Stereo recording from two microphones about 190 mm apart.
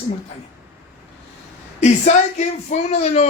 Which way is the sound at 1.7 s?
35° left (ahead or behind).